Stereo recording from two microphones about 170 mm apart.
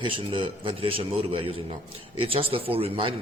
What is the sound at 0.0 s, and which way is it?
A man's voice, 30° right (ahead or behind).